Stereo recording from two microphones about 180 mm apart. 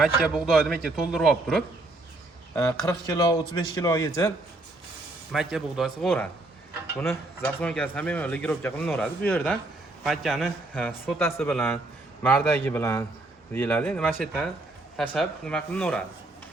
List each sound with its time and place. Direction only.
0.0 s a man's voice: 5° right (ahead or behind)
2.6 s speech: 15° left (ahead or behind)
5.3 s a man's voice: centre (ahead or behind)
11.0 s a man's voice: 15° left (ahead or behind)